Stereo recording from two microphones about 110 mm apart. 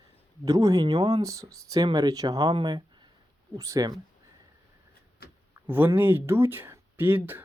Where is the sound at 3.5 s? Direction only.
30° right (ahead or behind).